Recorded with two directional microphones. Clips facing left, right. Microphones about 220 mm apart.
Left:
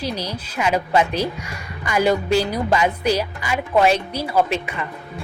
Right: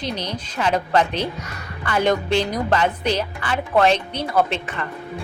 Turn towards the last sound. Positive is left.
turn(degrees=10)  # may be behind; listen again after turning